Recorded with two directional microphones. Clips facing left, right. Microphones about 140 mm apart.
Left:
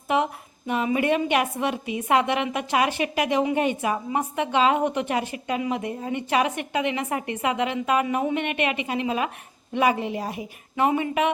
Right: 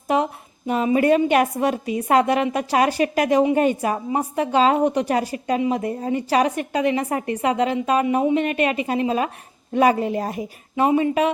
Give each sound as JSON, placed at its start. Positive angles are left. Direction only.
{"t": 0.7, "sound": "a woman's voice", "side_deg": -35}
{"t": 10.8, "sound": "a woman's voice", "side_deg": -30}